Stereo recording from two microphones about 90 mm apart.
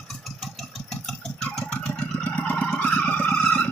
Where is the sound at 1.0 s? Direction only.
10° left (ahead or behind).